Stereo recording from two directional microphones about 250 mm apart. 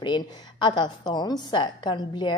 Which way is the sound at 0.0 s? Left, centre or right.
Centre.